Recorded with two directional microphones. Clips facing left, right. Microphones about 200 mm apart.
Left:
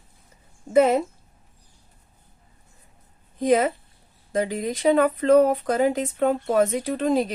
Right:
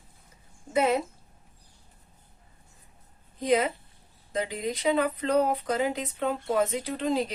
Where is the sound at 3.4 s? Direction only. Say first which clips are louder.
Left 5 dB; 50° left (ahead or behind).